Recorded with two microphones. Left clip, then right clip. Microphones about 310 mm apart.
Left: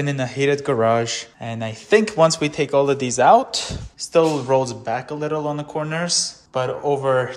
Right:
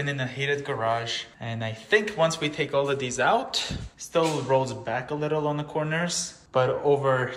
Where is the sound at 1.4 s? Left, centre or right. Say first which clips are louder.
Left 5 dB; centre.